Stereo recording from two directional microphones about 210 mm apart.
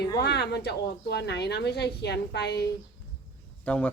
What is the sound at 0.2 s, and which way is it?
A woman's voice, 50° left (ahead or behind).